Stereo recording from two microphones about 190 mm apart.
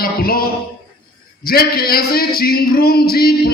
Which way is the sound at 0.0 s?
50° left (ahead or behind).